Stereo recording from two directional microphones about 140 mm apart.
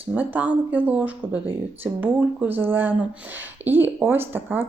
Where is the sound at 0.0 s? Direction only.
15° right (ahead or behind).